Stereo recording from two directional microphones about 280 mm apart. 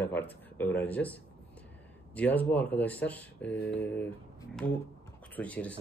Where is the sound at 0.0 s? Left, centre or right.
Centre.